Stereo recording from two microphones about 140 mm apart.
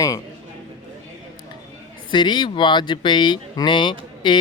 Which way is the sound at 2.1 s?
35° left (ahead or behind).